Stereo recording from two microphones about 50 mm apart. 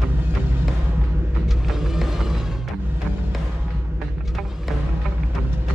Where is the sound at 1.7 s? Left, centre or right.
Centre.